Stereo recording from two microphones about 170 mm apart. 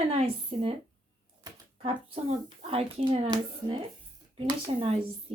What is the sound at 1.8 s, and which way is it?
Speech, 35° right (ahead or behind).